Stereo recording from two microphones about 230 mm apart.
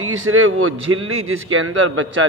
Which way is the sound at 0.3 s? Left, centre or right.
Right.